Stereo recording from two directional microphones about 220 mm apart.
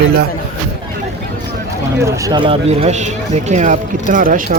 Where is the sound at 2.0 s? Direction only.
15° right (ahead or behind).